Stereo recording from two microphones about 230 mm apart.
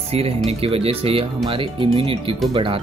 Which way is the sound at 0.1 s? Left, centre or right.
Right.